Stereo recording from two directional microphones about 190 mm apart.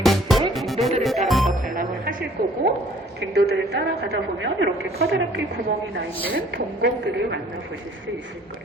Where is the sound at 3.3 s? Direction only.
60° right (ahead or behind).